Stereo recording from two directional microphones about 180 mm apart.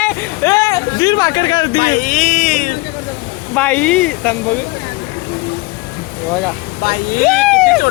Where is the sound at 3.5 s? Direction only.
10° left (ahead or behind).